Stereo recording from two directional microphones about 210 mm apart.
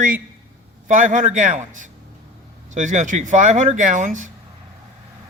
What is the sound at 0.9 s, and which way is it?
Speech, 40° right (ahead or behind).